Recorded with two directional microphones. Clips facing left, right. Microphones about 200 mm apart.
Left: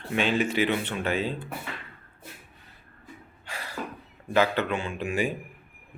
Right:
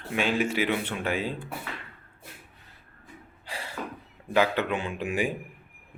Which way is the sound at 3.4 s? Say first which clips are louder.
Right 1 dB; 30° right (ahead or behind).